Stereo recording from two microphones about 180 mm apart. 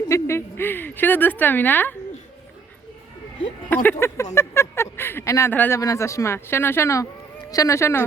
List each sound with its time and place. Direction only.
0.1 s a woman's voice: 15° left (ahead or behind)
3.9 s speech: 15° left (ahead or behind)